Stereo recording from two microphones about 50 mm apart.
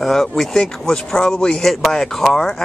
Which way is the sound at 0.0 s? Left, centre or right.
Centre.